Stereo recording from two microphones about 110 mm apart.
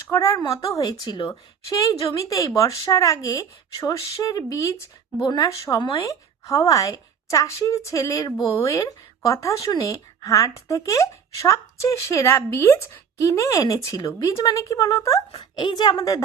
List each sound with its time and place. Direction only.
0.1 s a woman's voice: 30° left (ahead or behind); by 1.3 s 45° left (ahead or behind)
1.3 s a woman's voice: 30° left (ahead or behind)
15.4 s a woman's voice: 40° left (ahead or behind)